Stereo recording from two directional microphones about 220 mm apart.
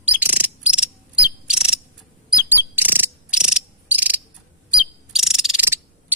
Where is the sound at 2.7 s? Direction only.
10° right (ahead or behind).